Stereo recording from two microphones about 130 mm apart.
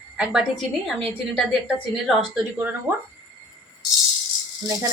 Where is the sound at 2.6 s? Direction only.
15° right (ahead or behind).